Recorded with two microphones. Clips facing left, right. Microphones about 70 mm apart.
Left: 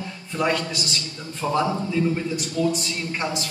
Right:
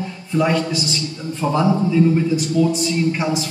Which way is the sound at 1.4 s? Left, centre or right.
Right.